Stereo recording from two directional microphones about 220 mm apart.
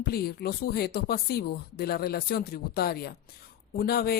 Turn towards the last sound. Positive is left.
turn(degrees=45)  # may be behind; listen again after turning